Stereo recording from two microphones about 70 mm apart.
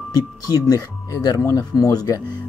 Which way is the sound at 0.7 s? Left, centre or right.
Left.